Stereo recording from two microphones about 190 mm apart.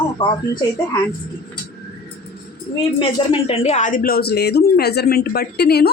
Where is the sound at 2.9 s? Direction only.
30° left (ahead or behind).